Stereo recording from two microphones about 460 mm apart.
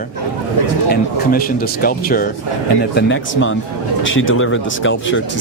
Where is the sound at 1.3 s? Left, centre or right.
Centre.